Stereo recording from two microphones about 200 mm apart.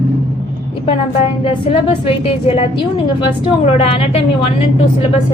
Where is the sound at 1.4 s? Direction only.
25° left (ahead or behind).